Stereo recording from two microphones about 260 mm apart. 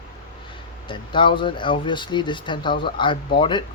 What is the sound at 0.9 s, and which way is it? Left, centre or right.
Speech, centre.